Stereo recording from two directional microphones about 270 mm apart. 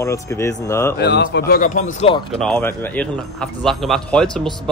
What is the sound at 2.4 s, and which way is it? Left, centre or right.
Speech, centre.